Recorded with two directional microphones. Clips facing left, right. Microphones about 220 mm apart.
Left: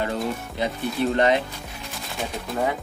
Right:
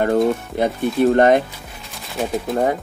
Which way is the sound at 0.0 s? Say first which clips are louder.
Right 10 dB; 50° right (ahead or behind).